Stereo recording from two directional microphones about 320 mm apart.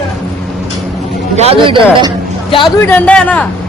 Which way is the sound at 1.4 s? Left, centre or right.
Centre.